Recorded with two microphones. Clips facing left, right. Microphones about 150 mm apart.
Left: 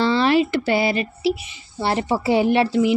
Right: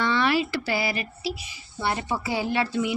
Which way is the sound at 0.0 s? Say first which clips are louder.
Left 6 dB; 30° left (ahead or behind).